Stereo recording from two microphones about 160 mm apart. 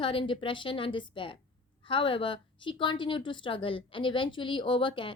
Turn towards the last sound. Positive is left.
turn(degrees=30)  # may be behind; listen again after turning